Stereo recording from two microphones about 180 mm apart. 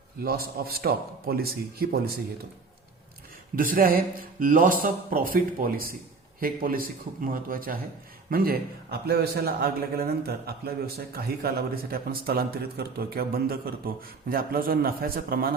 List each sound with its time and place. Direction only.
0.2 s a man's voice: 55° right (ahead or behind)
3.5 s a man's voice: 50° right (ahead or behind)